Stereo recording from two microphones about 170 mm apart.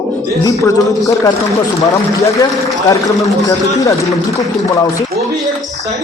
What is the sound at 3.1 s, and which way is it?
Speech, centre (ahead or behind).